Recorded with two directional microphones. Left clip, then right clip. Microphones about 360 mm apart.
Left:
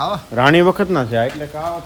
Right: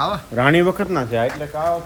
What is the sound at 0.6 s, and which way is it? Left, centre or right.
Speech, left.